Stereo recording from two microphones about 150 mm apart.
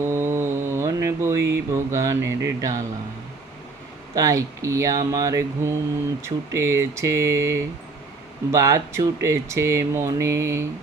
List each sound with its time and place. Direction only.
0.0 s speech: 15° right (ahead or behind)
4.1 s speech: 20° right (ahead or behind)